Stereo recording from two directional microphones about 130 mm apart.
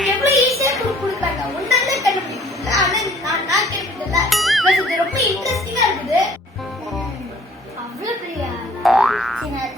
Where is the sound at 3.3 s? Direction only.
25° right (ahead or behind).